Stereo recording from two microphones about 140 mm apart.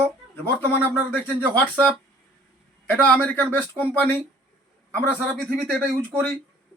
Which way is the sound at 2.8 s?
10° left (ahead or behind).